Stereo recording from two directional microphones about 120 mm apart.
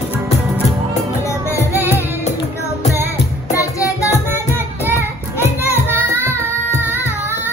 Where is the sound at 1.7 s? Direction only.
15° right (ahead or behind).